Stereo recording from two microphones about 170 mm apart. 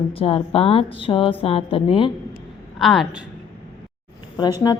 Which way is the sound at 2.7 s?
Centre (ahead or behind).